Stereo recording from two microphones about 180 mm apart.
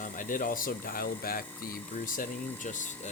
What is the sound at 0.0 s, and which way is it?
Speech, 50° left (ahead or behind).